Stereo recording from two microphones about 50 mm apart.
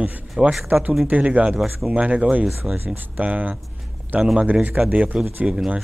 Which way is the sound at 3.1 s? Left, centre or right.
Right.